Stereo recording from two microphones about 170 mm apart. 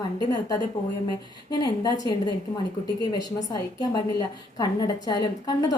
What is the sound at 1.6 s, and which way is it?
Speech, 25° left (ahead or behind).